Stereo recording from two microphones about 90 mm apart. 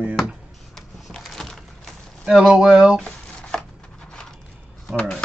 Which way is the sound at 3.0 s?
10° left (ahead or behind).